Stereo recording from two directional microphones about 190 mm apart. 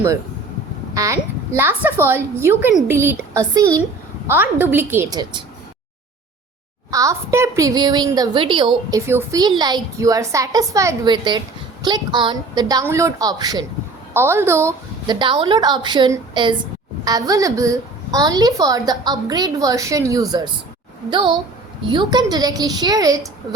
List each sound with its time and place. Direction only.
0.9 s a woman's voice: 15° right (ahead or behind)
6.9 s a woman's voice: 15° right (ahead or behind)